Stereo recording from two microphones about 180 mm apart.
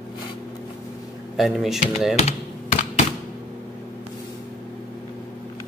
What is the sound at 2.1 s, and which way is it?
Typing, 40° left (ahead or behind).